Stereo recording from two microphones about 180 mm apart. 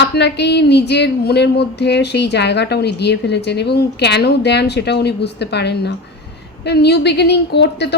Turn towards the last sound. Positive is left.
turn(degrees=70)  # may be behind; listen again after turning